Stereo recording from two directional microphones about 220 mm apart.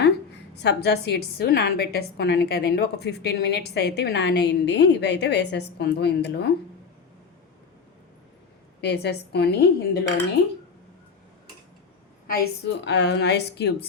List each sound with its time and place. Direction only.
0.5 s a woman's voice: 50° left (ahead or behind)
8.8 s a woman's voice: 50° left (ahead or behind)
12.3 s a woman's voice: 45° left (ahead or behind)